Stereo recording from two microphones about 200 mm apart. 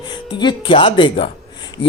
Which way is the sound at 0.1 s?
20° left (ahead or behind).